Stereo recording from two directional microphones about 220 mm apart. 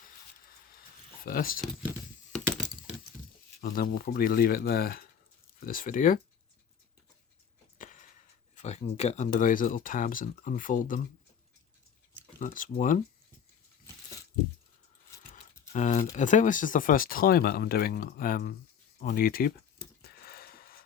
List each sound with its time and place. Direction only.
1.2 s speech: 40° left (ahead or behind)
3.6 s speech: 40° left (ahead or behind)
7.8 s a sound: 35° left (ahead or behind)
8.5 s speech: 30° left (ahead or behind)
12.4 s speech: 35° left (ahead or behind)
15.3 s typing: 35° left (ahead or behind)
16.1 s speech: 35° left (ahead or behind)
20.0 s a sound: 45° left (ahead or behind)